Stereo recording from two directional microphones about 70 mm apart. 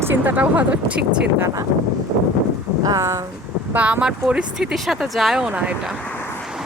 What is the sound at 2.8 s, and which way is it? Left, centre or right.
Speech, right.